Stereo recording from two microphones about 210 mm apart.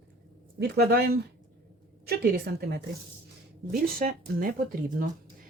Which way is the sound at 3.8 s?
45° right (ahead or behind).